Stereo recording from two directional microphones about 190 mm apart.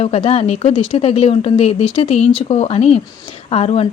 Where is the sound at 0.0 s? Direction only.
30° left (ahead or behind).